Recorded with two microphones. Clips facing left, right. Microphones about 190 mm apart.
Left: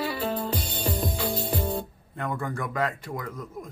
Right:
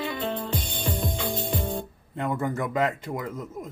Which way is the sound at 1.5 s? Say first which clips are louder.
Left 1 dB; 40° left (ahead or behind).